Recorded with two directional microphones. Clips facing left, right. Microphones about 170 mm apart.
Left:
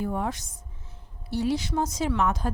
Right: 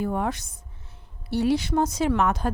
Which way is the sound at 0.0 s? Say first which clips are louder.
Right 3 dB; 65° right (ahead or behind).